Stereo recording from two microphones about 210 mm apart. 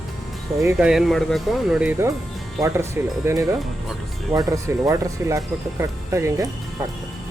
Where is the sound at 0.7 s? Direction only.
5° right (ahead or behind).